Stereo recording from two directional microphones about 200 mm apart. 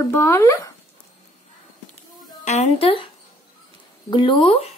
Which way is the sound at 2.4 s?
35° left (ahead or behind).